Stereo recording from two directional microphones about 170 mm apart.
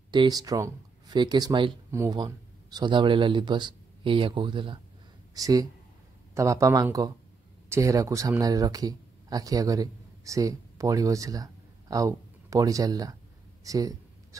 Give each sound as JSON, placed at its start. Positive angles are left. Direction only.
{"t": 0.1, "sound": "speech", "side_deg": -25}